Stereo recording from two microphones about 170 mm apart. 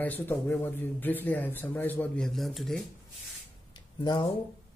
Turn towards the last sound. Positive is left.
turn(degrees=25)  # may be behind; listen again after turning